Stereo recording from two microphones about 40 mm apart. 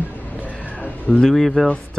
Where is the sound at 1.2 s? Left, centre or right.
Centre.